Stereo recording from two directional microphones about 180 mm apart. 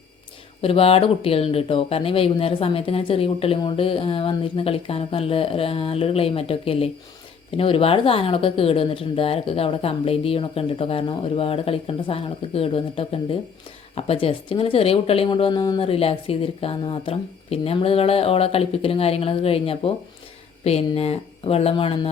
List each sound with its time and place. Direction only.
0.6 s speech: 30° left (ahead or behind)